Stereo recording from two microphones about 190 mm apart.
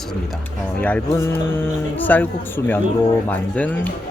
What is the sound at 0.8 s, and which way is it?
Speech, 10° left (ahead or behind).